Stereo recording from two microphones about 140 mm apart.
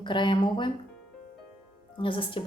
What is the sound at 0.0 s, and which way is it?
Speech, 35° left (ahead or behind).